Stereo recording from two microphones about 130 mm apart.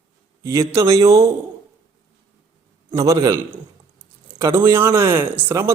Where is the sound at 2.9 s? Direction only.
25° right (ahead or behind).